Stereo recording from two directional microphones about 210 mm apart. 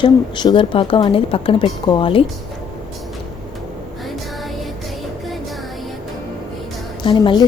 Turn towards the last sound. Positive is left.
turn(degrees=25)  # may be behind; listen again after turning